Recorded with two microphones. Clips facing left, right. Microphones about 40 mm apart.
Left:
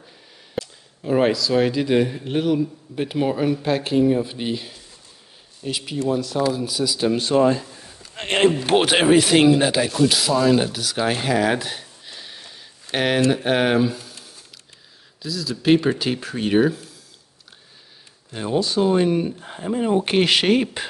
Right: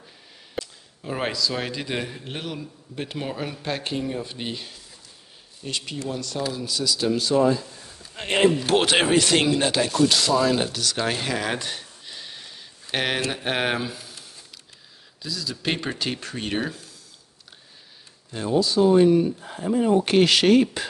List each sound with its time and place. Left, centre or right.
0.6 s speech: centre
7.1 s speech: left
8.7 s speech: centre
18.5 s speech: left